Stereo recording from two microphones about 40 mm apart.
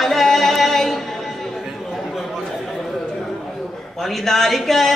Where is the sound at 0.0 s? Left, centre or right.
Centre.